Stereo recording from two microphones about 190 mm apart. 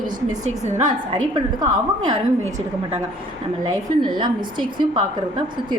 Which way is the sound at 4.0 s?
25° right (ahead or behind).